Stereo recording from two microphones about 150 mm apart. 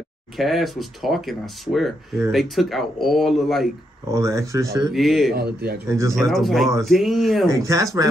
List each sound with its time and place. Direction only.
0.4 s speech: centre (ahead or behind)
4.1 s speech: 20° right (ahead or behind)
4.9 s speech: centre (ahead or behind)
5.3 s speech: 90° right
5.9 s speech: 20° right (ahead or behind)
6.1 s speech: centre (ahead or behind)
7.5 s speech: 20° right (ahead or behind)